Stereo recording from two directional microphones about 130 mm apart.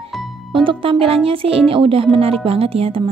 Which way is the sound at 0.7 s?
45° right (ahead or behind).